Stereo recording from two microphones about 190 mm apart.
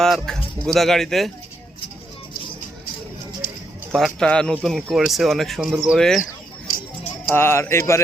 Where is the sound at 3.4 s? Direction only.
50° left (ahead or behind).